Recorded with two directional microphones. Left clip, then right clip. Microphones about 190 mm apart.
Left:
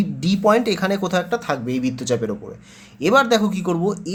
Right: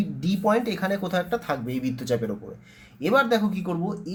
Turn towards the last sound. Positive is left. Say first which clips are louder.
# left 8 dB
turn(degrees=35)  # may be behind; listen again after turning